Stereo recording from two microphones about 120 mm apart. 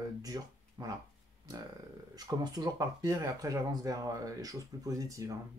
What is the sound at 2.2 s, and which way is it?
Speech, 35° right (ahead or behind).